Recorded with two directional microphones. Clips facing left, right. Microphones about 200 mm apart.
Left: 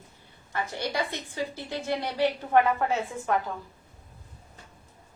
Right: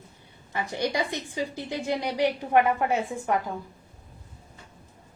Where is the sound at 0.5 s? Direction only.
15° right (ahead or behind).